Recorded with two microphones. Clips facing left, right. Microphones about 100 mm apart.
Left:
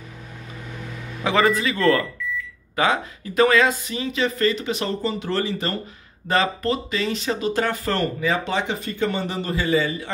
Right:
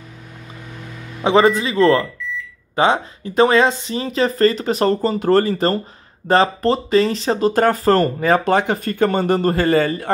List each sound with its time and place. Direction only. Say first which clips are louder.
1.2 s speech: right 5 dB; 25° right (ahead or behind); by 10.1 s 50° right (ahead or behind)